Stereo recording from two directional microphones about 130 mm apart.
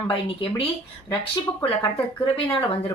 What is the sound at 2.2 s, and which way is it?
Speech, 45° left (ahead or behind).